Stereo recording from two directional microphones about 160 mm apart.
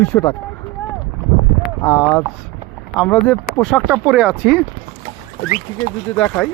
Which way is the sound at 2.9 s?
5° left (ahead or behind).